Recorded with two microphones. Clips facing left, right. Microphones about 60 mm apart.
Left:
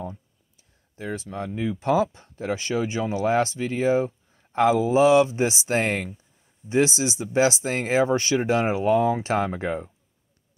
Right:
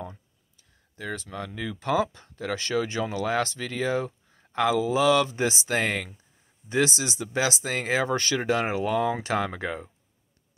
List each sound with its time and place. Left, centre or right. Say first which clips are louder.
0.9 s speech: left 3 dB; left
5.7 s speech: left 3 dB; left
7.0 s speech: left 6 dB; left